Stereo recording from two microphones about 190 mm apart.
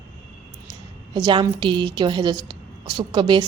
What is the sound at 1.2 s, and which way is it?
A woman's voice, 20° right (ahead or behind).